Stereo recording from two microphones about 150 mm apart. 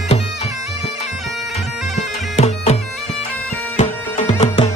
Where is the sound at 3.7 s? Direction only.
50° left (ahead or behind).